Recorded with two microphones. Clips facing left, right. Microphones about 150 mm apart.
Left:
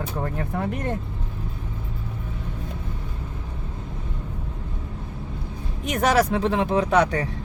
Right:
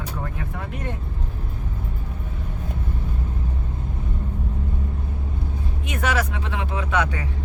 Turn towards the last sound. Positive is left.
turn(degrees=35)  # may be behind; listen again after turning